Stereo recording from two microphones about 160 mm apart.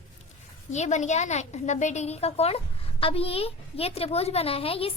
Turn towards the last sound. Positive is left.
turn(degrees=35)  # may be behind; listen again after turning